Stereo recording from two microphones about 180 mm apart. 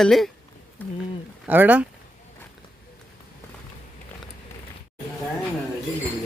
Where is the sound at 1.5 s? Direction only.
10° right (ahead or behind).